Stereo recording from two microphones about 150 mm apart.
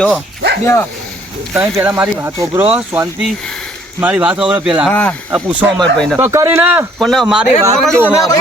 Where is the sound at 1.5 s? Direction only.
10° right (ahead or behind).